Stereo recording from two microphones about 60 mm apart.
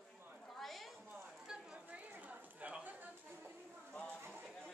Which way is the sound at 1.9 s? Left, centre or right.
Right.